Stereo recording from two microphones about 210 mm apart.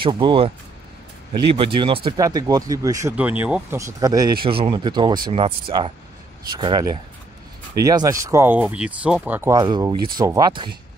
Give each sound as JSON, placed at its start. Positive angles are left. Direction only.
{"t": 0.0, "sound": "speech", "side_deg": -25}